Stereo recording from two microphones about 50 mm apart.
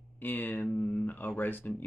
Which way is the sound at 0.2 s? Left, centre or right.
Left.